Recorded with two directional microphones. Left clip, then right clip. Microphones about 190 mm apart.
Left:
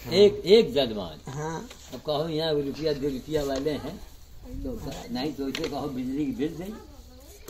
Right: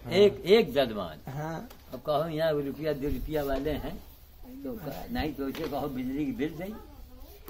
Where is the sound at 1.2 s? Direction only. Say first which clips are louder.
Left 3 dB; 30° right (ahead or behind).